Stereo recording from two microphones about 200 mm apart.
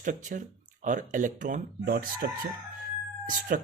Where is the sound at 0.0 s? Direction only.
40° right (ahead or behind).